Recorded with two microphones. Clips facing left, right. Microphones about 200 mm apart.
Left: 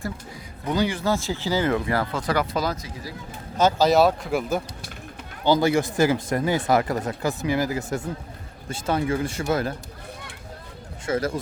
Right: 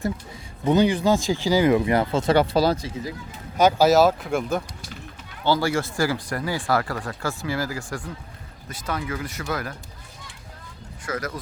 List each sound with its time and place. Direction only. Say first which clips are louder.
0.6 s speech: right 5 dB; 20° right (ahead or behind)
3.6 s speech: right 1 dB; 10° right (ahead or behind); by 4.6 s 5° left (ahead or behind)
5.5 s speech: left 3 dB; 20° left (ahead or behind)
11.0 s speech: left 5 dB; 25° left (ahead or behind)